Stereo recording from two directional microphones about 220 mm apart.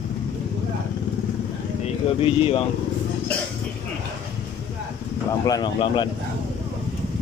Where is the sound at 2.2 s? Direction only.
25° left (ahead or behind).